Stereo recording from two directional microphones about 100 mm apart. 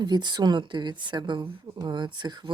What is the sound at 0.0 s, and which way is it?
Speech, 50° right (ahead or behind).